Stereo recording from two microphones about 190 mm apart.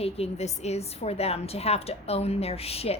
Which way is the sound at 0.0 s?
35° left (ahead or behind).